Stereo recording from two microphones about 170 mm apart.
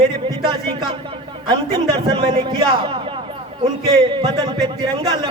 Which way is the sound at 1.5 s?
30° right (ahead or behind).